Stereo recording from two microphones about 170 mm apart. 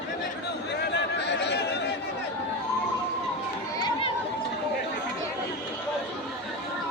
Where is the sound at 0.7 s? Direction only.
90° left.